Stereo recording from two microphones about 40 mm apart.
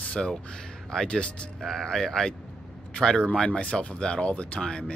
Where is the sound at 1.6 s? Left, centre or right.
Centre.